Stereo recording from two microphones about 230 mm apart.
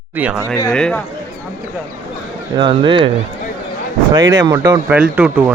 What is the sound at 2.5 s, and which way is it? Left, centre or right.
Speech, centre.